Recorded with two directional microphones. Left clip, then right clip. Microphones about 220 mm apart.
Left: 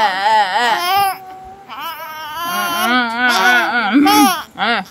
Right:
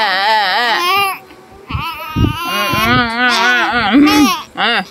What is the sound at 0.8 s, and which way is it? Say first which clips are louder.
Babbling: right 1 dB; 20° left (ahead or behind).